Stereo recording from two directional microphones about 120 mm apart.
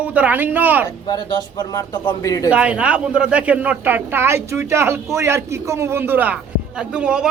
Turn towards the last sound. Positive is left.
turn(degrees=-10)  # may be behind; listen again after turning